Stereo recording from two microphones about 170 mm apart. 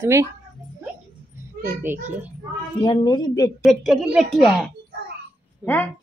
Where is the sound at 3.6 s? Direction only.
Centre (ahead or behind).